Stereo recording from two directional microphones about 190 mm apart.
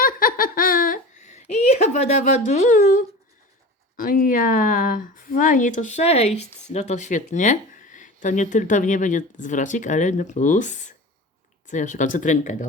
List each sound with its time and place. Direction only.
0.0 s laughter: 45° left (ahead or behind)
3.9 s speech: 45° left (ahead or behind)